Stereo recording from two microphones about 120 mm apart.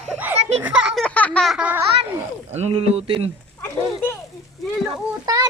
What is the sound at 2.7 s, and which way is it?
Speech, 55° right (ahead or behind).